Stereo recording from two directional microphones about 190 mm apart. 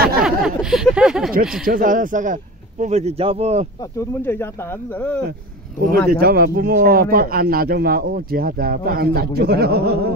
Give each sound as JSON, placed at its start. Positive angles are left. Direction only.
{"t": 0.2, "sound": "a sound", "side_deg": 0}
{"t": 1.4, "sound": "speech", "side_deg": -5}
{"t": 1.7, "sound": "speech", "side_deg": -45}
{"t": 4.2, "sound": "speech", "side_deg": 10}
{"t": 5.8, "sound": "speech", "side_deg": -55}